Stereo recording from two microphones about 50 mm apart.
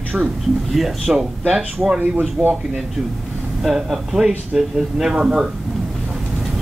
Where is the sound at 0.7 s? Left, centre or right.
Centre.